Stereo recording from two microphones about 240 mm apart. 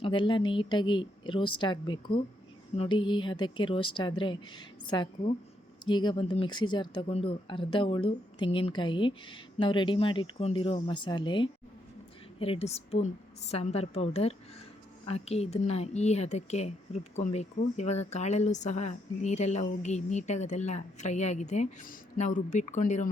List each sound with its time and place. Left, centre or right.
0.0 s speech: centre